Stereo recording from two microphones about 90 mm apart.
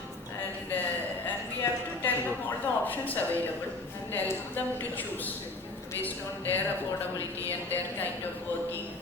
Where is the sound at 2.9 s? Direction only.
20° left (ahead or behind).